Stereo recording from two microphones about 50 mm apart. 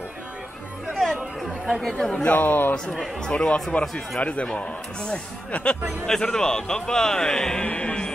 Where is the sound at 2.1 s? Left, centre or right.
Left.